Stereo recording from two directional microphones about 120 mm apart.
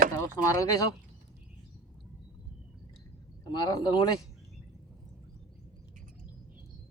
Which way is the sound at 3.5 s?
35° left (ahead or behind).